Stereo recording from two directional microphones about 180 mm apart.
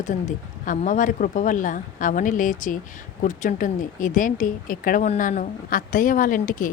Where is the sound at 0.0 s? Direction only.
45° left (ahead or behind).